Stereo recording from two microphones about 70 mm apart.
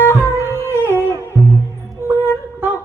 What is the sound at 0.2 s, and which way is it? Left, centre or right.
Music, right.